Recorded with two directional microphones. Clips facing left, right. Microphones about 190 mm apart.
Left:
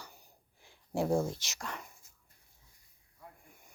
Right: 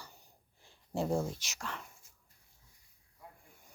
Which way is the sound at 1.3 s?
10° right (ahead or behind).